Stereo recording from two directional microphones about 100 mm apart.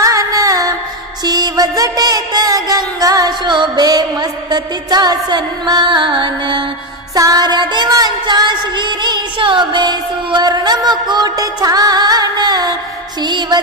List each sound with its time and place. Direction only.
0.0 s music: 35° right (ahead or behind); by 6.6 s 55° right (ahead or behind)
7.2 s music: 40° right (ahead or behind)